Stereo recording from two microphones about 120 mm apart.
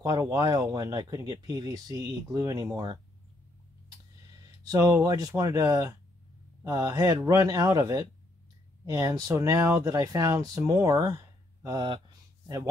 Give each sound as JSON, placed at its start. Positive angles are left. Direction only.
{"t": 0.0, "sound": "speech", "side_deg": -30}
{"t": 4.6, "sound": "speech", "side_deg": -30}